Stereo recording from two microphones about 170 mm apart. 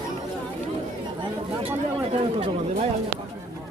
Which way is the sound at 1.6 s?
35° right (ahead or behind).